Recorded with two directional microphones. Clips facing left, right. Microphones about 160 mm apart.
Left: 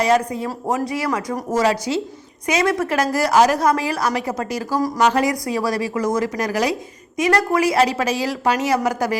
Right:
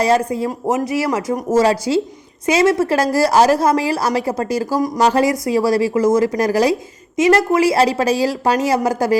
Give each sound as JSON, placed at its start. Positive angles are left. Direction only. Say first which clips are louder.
{"t": 0.0, "sound": "a woman's voice", "louder": "right 2 dB", "side_deg": -30}